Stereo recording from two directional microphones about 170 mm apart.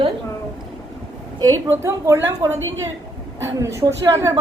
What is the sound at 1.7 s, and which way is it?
A woman's voice, 15° right (ahead or behind).